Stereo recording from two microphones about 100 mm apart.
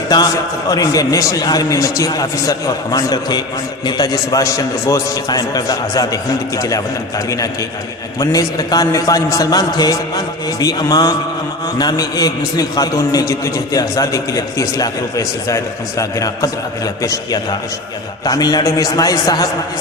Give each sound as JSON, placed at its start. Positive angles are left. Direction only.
{"t": 0.7, "sound": "a man's voice", "side_deg": 35}
{"t": 8.2, "sound": "a man's voice", "side_deg": 35}